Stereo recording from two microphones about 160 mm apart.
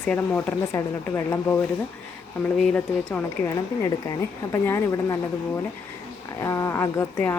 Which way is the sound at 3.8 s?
20° left (ahead or behind).